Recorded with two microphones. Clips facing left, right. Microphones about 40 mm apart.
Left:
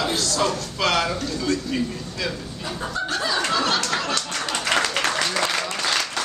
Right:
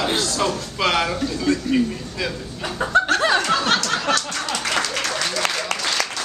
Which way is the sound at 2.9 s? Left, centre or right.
Right.